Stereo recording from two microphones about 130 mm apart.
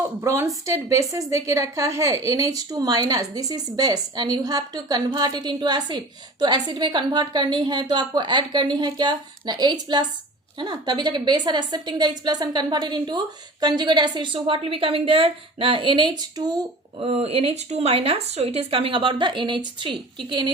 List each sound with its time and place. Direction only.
0.0 s a woman's voice: 20° right (ahead or behind)
17.0 s speech: 50° right (ahead or behind)